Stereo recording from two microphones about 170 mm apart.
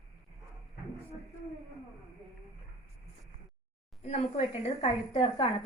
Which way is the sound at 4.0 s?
35° left (ahead or behind).